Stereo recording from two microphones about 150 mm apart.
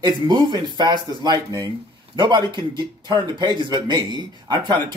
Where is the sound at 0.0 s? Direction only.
30° right (ahead or behind).